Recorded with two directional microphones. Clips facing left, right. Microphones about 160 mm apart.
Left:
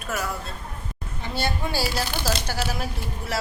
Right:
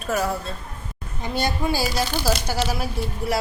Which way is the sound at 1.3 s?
15° right (ahead or behind).